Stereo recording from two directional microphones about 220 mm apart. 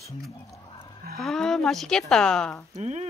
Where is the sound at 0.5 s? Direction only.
20° left (ahead or behind).